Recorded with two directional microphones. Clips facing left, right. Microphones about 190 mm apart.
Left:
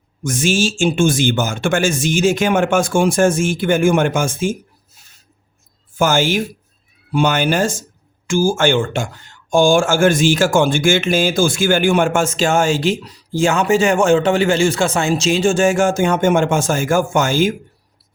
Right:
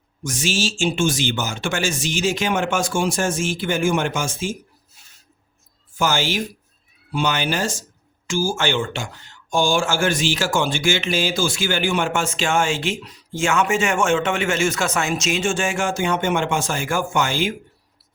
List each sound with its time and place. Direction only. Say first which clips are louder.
0.3 s speech: left 6 dB; 50° left (ahead or behind)
6.0 s speech: left 6 dB; 50° left (ahead or behind)